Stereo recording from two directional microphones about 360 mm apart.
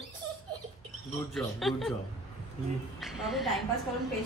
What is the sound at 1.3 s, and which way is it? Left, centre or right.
Speech, centre.